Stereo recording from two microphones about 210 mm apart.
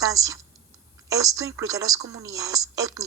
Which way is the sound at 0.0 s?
15° right (ahead or behind).